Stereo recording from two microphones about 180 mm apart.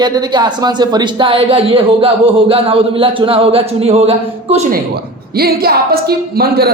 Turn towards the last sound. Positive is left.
turn(degrees=-60)  # may be behind; listen again after turning